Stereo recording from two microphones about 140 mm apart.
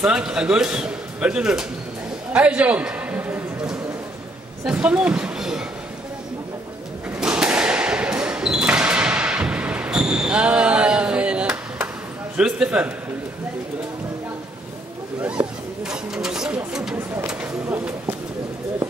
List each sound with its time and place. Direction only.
0.0 s speech: 5° right (ahead or behind)
2.3 s a sound: 10° right (ahead or behind)
4.6 s speech: 10° right (ahead or behind)
7.2 s basketball bounce: 5° right (ahead or behind)
12.4 s speech: 5° right (ahead or behind)
15.8 s a sound: 5° right (ahead or behind)
17.3 s speech: 10° right (ahead or behind)